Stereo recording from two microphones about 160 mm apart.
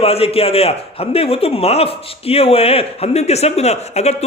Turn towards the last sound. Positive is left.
turn(degrees=40)  # may be behind; listen again after turning